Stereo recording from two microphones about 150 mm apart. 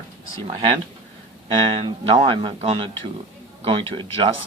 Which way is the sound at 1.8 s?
40° right (ahead or behind).